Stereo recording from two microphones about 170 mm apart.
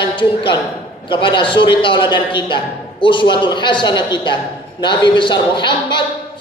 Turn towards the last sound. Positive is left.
turn(degrees=25)  # may be behind; listen again after turning